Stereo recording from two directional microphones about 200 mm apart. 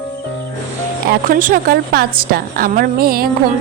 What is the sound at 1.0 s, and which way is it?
A woman's voice, 45° right (ahead or behind).